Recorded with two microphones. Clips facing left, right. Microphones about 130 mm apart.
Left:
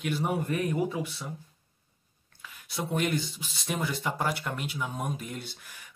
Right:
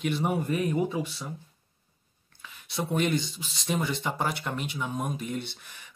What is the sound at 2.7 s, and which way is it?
Speech, 10° left (ahead or behind).